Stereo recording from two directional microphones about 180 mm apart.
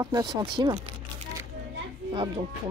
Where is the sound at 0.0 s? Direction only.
20° right (ahead or behind).